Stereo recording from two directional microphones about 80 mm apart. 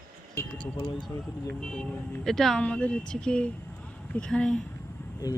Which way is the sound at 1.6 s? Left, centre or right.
Centre.